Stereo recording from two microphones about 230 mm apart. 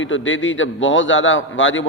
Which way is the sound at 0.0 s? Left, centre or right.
Left.